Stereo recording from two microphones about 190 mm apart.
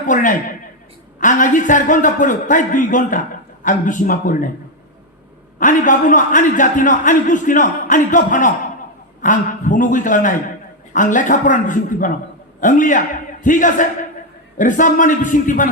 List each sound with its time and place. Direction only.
0.1 s speech: 45° left (ahead or behind)
5.5 s a man's voice: 45° left (ahead or behind)